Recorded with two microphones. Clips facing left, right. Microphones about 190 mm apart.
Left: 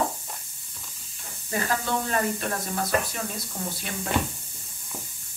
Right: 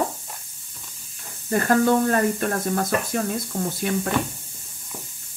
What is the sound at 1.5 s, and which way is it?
Speech, 50° right (ahead or behind).